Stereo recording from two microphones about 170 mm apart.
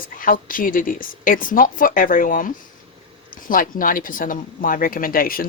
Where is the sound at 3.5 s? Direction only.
55° left (ahead or behind).